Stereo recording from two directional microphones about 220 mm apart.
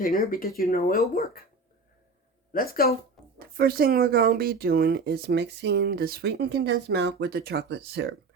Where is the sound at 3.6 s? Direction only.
45° right (ahead or behind).